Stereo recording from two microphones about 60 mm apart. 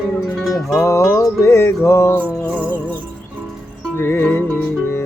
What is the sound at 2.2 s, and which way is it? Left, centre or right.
Music, right.